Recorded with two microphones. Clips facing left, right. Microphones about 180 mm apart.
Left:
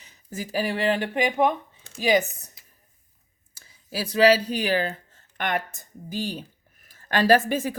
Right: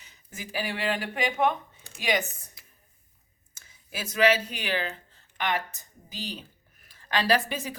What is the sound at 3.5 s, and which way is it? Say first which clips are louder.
Speech: left 7 dB; 35° left (ahead or behind).